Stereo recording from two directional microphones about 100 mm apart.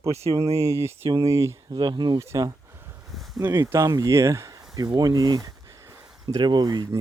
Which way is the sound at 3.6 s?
35° right (ahead or behind).